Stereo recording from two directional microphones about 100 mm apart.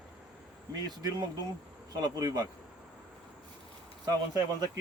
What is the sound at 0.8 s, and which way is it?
Speech, 45° right (ahead or behind).